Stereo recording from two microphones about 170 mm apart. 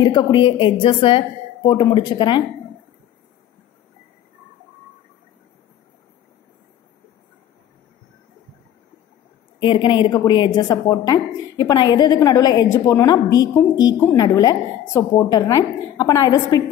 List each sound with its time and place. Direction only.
0.0 s a woman's voice: 25° left (ahead or behind)
9.6 s a woman's voice: 30° left (ahead or behind)